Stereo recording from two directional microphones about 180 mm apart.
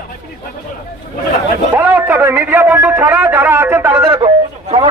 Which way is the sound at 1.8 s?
10° right (ahead or behind).